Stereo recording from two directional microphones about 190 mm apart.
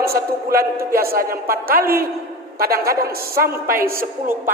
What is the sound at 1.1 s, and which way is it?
A woman's voice, 50° right (ahead or behind).